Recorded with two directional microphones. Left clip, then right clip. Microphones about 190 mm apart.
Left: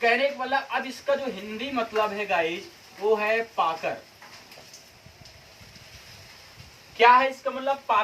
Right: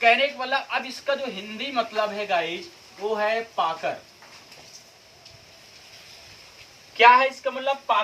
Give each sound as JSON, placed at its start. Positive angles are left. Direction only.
{"t": 0.0, "sound": "speech", "side_deg": -15}
{"t": 6.9, "sound": "speech", "side_deg": -20}